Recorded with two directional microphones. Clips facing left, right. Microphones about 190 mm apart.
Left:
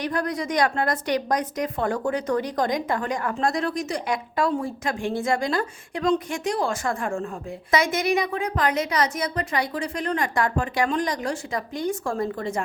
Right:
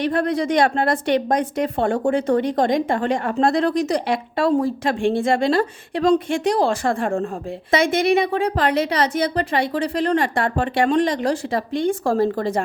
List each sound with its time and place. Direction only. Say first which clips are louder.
0.0 s a woman's voice: right 6 dB; 30° right (ahead or behind)